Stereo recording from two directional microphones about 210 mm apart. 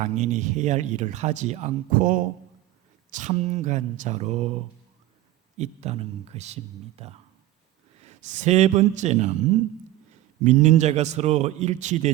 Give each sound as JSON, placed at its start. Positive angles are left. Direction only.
{"t": 0.0, "sound": "speech", "side_deg": -35}
{"t": 10.4, "sound": "speech", "side_deg": -35}